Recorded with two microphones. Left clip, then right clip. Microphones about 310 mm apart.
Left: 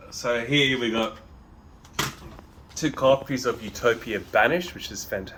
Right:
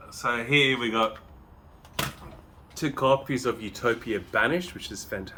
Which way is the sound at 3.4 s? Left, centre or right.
Right.